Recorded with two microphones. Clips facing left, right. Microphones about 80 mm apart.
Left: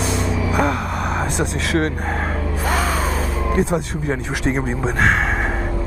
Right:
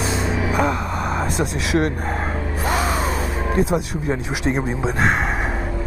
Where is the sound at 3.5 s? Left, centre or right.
Centre.